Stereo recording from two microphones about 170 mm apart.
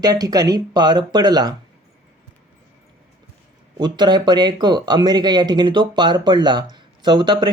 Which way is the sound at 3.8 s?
25° right (ahead or behind).